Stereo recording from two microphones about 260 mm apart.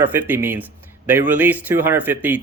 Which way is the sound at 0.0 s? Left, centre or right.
Centre.